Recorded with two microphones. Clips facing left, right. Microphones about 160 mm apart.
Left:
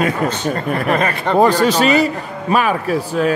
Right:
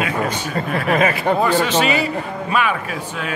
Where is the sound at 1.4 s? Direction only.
40° left (ahead or behind).